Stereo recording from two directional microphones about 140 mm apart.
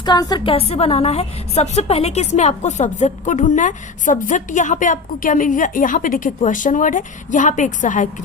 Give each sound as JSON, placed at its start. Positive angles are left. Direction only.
{"t": 0.0, "sound": "a woman's voice", "side_deg": 30}
{"t": 0.5, "sound": "a woman's voice", "side_deg": 45}